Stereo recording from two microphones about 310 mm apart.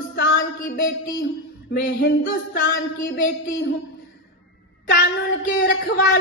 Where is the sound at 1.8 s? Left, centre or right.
Left.